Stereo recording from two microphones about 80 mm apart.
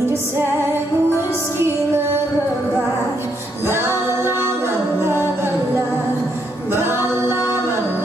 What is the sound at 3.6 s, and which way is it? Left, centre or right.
Music, right.